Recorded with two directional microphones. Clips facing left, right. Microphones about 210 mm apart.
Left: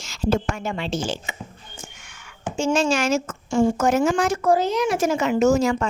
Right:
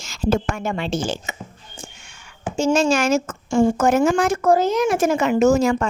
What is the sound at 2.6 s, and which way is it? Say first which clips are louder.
A woman's voice: right 3 dB; 40° right (ahead or behind).